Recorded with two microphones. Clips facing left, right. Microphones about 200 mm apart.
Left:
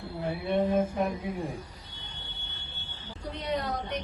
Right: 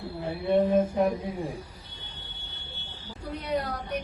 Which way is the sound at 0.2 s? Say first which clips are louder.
Right 1 dB; 25° right (ahead or behind).